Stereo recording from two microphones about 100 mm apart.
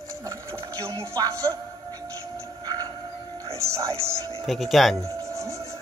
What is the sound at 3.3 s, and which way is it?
Speech, 30° right (ahead or behind).